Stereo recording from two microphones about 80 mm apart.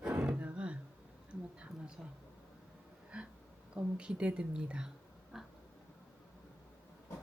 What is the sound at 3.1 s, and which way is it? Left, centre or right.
A woman's voice, centre.